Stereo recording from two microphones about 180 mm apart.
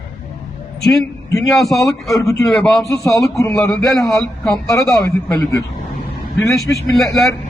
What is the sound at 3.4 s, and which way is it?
Speech, 15° left (ahead or behind).